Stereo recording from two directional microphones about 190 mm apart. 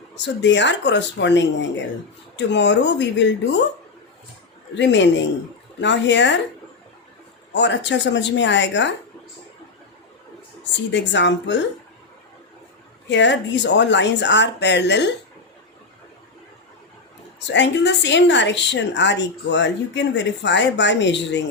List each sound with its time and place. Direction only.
0.4 s a woman's voice: 70° left (ahead or behind)
4.7 s a woman's voice: 70° left (ahead or behind)
7.5 s a woman's voice: 70° left (ahead or behind)
10.6 s a woman's voice: 70° left (ahead or behind)
13.1 s a woman's voice: 70° left (ahead or behind)
17.4 s a woman's voice: 70° left (ahead or behind)